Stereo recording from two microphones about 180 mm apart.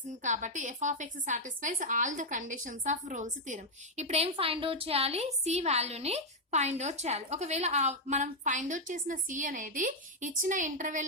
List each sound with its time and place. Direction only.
0.1 s a woman's voice: 45° right (ahead or behind)